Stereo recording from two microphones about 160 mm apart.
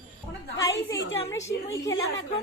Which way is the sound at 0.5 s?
20° left (ahead or behind).